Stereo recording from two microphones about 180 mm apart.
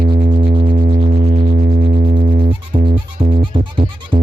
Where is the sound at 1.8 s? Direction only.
55° right (ahead or behind).